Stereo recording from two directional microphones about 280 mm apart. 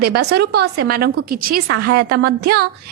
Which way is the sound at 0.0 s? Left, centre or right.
Right.